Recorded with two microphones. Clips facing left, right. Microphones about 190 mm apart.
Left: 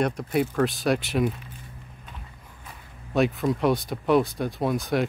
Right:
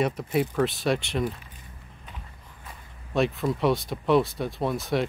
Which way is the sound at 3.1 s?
Centre (ahead or behind).